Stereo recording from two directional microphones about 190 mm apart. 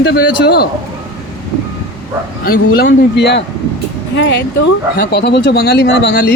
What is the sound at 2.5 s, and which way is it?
Speech, 55° left (ahead or behind).